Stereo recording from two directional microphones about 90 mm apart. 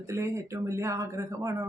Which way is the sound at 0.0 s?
30° right (ahead or behind).